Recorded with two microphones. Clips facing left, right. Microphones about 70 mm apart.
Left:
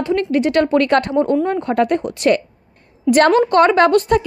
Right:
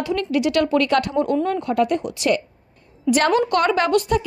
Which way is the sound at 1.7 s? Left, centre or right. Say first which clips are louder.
Left 3 dB; left.